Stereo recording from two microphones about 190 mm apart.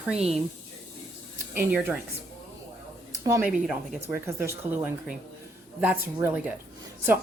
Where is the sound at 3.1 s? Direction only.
15° right (ahead or behind).